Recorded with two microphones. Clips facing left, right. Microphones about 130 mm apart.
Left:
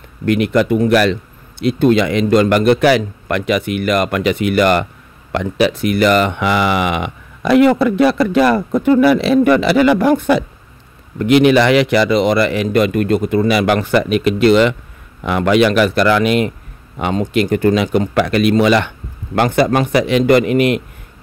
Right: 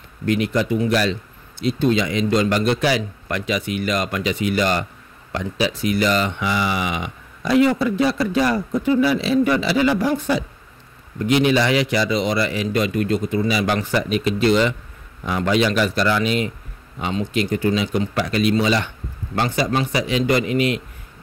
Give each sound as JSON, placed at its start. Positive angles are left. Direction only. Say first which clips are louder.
{"t": 0.2, "sound": "a man's voice", "louder": "left 6 dB", "side_deg": 60}